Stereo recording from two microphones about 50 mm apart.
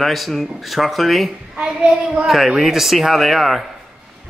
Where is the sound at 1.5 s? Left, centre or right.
Centre.